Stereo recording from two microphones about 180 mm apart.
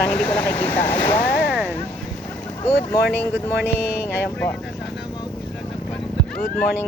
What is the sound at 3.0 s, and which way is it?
Speech, 65° left (ahead or behind).